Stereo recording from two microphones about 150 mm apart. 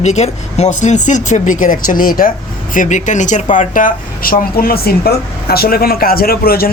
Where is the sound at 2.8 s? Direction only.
55° left (ahead or behind).